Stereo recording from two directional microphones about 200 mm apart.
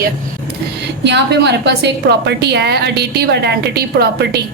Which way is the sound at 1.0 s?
60° right (ahead or behind).